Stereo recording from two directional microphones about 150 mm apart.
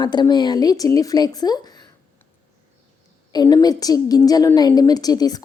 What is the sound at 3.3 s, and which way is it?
A woman's voice, 25° left (ahead or behind).